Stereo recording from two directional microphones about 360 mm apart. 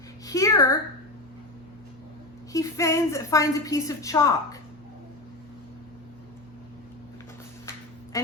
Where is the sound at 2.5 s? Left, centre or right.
Centre.